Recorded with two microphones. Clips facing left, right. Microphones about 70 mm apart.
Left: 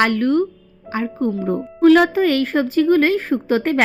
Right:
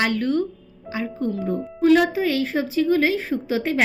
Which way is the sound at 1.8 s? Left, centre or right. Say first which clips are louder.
Left 5 dB; left.